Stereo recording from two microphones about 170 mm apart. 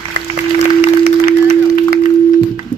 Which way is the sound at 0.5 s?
75° right (ahead or behind).